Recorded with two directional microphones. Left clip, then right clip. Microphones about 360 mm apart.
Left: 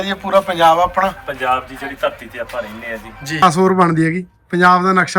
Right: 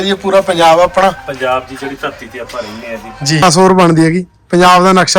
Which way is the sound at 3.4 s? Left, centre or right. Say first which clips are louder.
Right 4 dB; centre.